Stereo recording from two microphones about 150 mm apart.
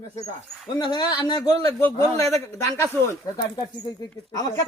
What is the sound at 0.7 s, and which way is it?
Speech, 30° left (ahead or behind).